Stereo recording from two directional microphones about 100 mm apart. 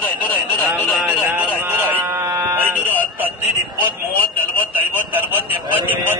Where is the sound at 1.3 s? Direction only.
15° right (ahead or behind).